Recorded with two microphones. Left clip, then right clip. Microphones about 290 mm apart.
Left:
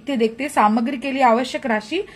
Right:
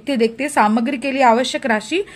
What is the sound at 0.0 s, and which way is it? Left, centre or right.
A woman's voice, right.